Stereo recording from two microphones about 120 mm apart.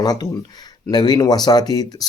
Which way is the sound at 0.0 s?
35° left (ahead or behind).